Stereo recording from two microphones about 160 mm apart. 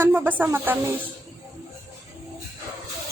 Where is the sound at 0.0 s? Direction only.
10° right (ahead or behind).